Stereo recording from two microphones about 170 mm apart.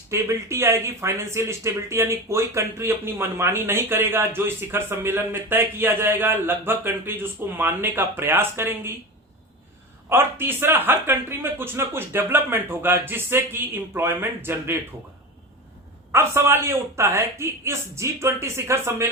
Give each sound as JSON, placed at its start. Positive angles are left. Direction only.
{"t": 0.1, "sound": "speech", "side_deg": -15}
{"t": 10.1, "sound": "speech", "side_deg": -15}
{"t": 16.1, "sound": "speech", "side_deg": -15}